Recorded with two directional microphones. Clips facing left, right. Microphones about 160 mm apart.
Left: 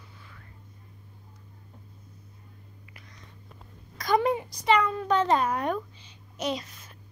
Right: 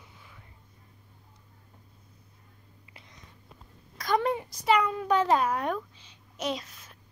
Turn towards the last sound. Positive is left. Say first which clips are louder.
# left 2 dB
turn(degrees=0)  # may be behind; listen again after turning